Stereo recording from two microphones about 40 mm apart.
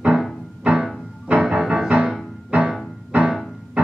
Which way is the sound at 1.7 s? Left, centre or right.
Right.